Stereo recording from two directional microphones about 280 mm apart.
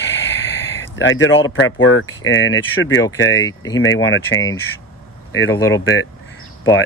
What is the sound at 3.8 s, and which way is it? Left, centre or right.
Speech, left.